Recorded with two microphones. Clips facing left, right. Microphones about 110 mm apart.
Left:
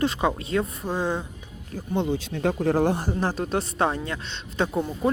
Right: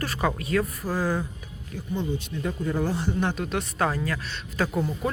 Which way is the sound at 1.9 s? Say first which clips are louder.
Left 4 dB; 80° left.